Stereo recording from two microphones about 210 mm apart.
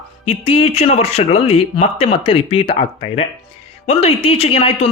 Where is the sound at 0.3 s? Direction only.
25° left (ahead or behind).